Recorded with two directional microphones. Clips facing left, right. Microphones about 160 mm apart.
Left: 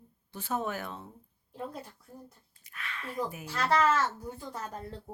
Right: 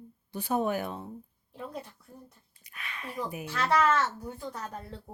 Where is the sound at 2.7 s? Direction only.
15° right (ahead or behind).